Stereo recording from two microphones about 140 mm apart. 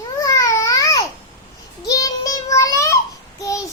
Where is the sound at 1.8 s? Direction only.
25° left (ahead or behind).